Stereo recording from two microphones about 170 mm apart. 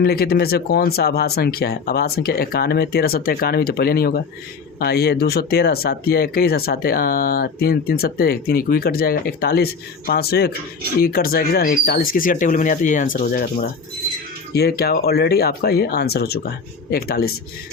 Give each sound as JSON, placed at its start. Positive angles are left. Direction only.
{"t": 0.0, "sound": "speech", "side_deg": 65}
{"t": 14.5, "sound": "speech", "side_deg": 70}